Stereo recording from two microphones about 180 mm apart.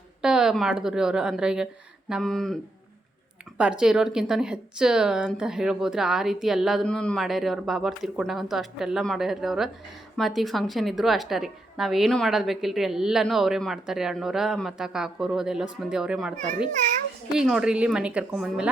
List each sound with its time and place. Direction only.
0.2 s a woman's voice: 5° right (ahead or behind)
3.6 s a woman's voice: 5° right (ahead or behind)
17.3 s a woman's voice: 5° right (ahead or behind)